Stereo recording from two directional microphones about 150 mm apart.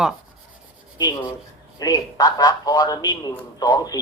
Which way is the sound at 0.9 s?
25° left (ahead or behind).